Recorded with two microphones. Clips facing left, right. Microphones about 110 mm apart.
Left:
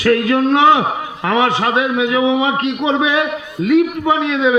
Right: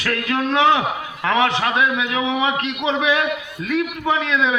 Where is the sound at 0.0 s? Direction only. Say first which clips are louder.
Left 8 dB; 25° left (ahead or behind).